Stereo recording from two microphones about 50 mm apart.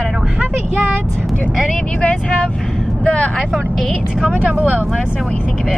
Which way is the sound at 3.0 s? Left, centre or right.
Left.